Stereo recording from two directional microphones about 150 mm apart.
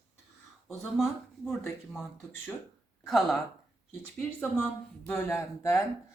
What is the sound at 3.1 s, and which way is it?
Speech, centre (ahead or behind).